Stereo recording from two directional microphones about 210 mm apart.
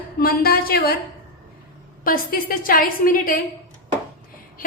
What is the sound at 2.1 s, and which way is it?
A woman's voice, 45° left (ahead or behind).